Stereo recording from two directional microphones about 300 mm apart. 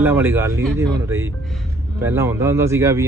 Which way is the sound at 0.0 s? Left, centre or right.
Centre.